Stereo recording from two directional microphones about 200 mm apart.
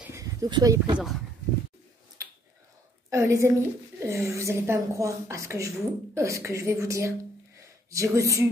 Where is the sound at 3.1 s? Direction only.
15° right (ahead or behind).